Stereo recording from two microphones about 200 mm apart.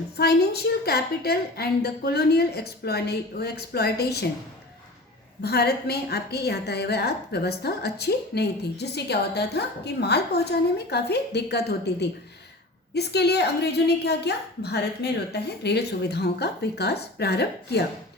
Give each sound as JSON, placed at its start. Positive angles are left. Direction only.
{"t": 0.2, "sound": "a woman's voice", "side_deg": 55}
{"t": 5.4, "sound": "a woman's voice", "side_deg": 55}